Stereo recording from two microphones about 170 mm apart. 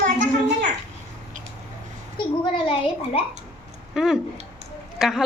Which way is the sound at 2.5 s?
30° left (ahead or behind).